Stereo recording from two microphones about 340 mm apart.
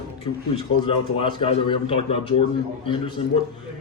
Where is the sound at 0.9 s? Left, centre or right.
Centre.